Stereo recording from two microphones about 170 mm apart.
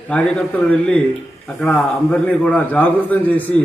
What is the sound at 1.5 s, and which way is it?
A man's voice, 5° left (ahead or behind).